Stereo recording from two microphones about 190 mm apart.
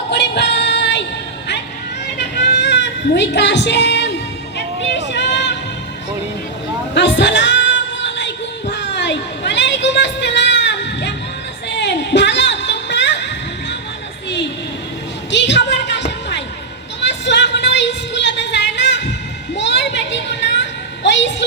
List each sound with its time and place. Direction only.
0.1 s music: 65° left (ahead or behind)
2.1 s child singing: 65° left (ahead or behind)
4.5 s music: 65° left (ahead or behind)
6.9 s a sound: 70° left (ahead or behind)
15.3 s music: 65° left (ahead or behind)
19.5 s a sound: 70° left (ahead or behind)